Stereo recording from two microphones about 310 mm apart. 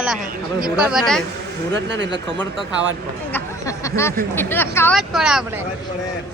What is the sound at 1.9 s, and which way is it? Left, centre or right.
Speech, right.